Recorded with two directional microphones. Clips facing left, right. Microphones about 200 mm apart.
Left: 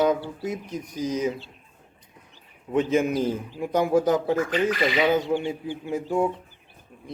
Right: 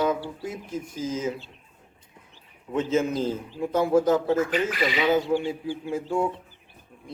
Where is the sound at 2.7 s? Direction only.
15° left (ahead or behind).